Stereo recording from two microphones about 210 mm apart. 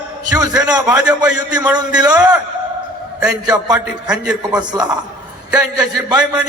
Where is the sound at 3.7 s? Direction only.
5° right (ahead or behind).